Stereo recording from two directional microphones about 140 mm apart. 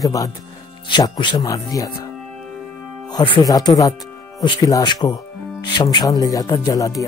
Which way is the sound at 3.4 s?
25° left (ahead or behind).